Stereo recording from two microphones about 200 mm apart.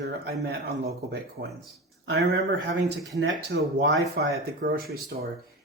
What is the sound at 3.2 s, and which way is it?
Speech, 70° right (ahead or behind).